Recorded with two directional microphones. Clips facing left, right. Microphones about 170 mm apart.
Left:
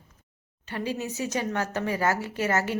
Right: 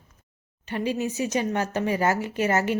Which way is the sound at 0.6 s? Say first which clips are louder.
Right 4 dB; 15° right (ahead or behind).